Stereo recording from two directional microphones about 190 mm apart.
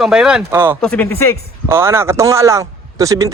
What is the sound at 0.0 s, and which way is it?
Speech, centre (ahead or behind).